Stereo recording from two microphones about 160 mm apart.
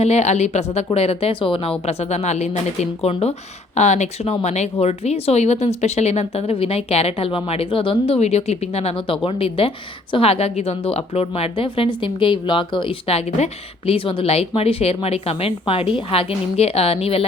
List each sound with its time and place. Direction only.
0.0 s a woman's voice: 40° left (ahead or behind)